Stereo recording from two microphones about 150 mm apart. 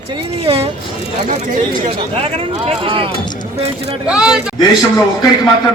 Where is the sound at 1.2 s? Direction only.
55° right (ahead or behind).